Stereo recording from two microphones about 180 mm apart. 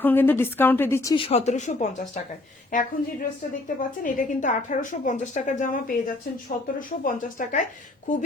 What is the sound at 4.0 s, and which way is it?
A woman's voice, 45° left (ahead or behind).